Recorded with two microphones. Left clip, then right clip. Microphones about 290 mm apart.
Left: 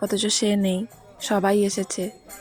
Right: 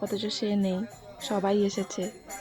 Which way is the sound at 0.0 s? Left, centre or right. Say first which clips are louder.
Left 8 dB; right.